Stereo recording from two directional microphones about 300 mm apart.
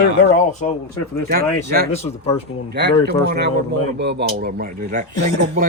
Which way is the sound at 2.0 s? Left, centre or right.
Left.